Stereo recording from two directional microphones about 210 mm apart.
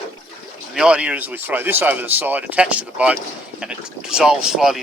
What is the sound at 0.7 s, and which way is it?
Speech, 5° right (ahead or behind).